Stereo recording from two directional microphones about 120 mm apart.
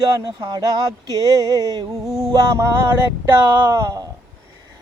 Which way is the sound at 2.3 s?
25° right (ahead or behind).